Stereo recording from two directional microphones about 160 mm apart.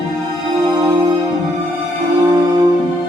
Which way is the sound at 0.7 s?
25° right (ahead or behind).